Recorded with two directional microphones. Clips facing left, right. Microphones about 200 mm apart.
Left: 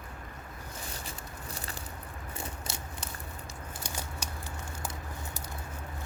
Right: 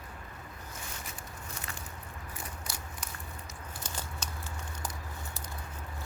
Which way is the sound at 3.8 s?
10° left (ahead or behind).